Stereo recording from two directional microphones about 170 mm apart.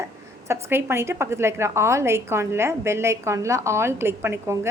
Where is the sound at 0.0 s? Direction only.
15° right (ahead or behind).